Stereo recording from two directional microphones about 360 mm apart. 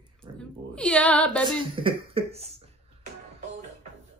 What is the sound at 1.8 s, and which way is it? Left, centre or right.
Cough, centre.